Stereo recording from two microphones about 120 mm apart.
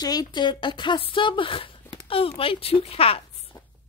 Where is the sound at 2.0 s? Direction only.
50° left (ahead or behind).